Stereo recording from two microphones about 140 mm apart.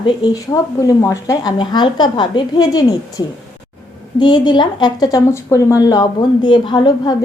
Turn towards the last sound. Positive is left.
turn(degrees=30)  # may be behind; listen again after turning